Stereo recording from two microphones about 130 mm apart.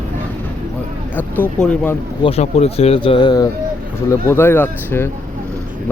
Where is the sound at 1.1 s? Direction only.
10° left (ahead or behind).